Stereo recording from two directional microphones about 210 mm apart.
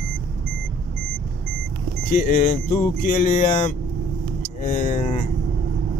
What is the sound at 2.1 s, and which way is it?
Speech, 40° left (ahead or behind).